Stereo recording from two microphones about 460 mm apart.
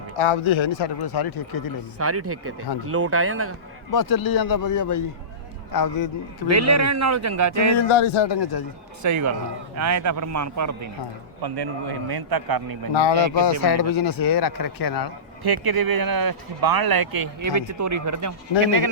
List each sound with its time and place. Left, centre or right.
0.2 s speech: left
2.0 s speech: right
3.9 s speech: left
6.5 s speech: right
7.8 s speech: left
9.0 s speech: right
11.4 s a man's voice: right
12.9 s speech: left
13.6 s speech: left
15.4 s speech: right